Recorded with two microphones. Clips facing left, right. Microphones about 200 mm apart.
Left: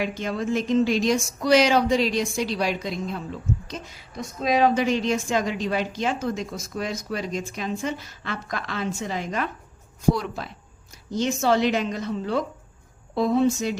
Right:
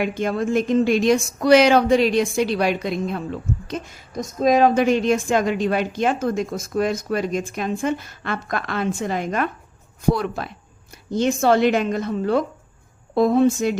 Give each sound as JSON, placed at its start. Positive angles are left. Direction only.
{"t": 0.0, "sound": "a woman's voice", "side_deg": -55}